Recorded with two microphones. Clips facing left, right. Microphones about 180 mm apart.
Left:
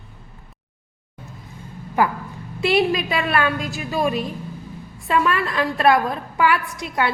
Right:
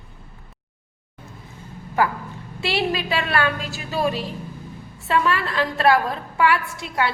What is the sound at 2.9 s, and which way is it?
Speech, 35° right (ahead or behind).